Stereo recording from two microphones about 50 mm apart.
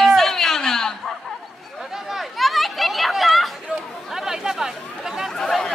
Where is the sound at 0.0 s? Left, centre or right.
Centre.